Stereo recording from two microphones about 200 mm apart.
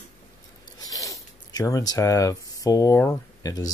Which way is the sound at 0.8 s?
15° left (ahead or behind).